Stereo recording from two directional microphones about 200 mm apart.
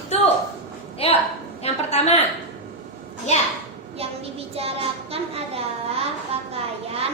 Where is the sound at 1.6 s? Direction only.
30° left (ahead or behind).